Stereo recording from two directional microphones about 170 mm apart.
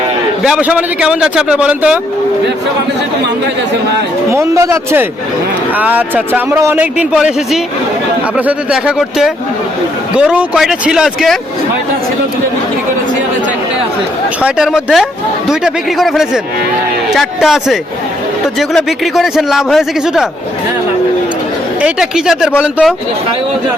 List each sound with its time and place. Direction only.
0.4 s a man's voice: 5° right (ahead or behind)
4.3 s a man's voice: 15° right (ahead or behind); by 11.3 s centre (ahead or behind)
14.4 s a man's voice: 5° right (ahead or behind)
21.8 s a man's voice: 5° right (ahead or behind)